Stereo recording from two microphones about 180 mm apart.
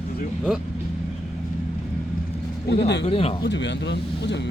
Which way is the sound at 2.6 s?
65° left (ahead or behind).